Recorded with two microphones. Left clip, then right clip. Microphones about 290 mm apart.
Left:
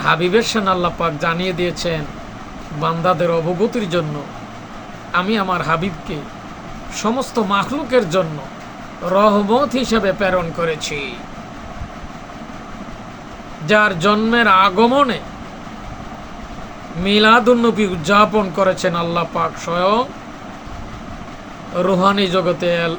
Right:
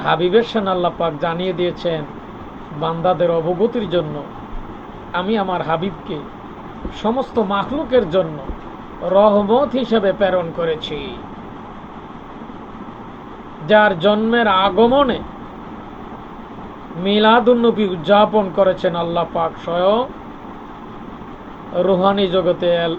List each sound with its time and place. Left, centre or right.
0.1 s speech: left
1.4 s speech: left
1.6 s speech: left
5.1 s speech: left
7.3 s speech: centre
13.7 s speech: centre
17.0 s speech: left
21.8 s speech: centre